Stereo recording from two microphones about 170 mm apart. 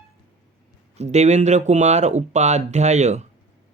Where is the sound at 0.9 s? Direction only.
40° right (ahead or behind).